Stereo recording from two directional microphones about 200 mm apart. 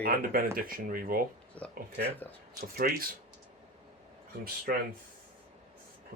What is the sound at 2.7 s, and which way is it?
Speech, 45° right (ahead or behind).